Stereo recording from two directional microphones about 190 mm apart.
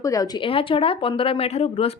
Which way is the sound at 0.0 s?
20° left (ahead or behind).